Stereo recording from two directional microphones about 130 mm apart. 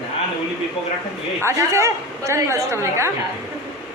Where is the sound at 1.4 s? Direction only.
20° right (ahead or behind).